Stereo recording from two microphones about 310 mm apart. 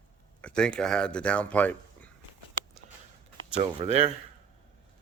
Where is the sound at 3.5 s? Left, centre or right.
Centre.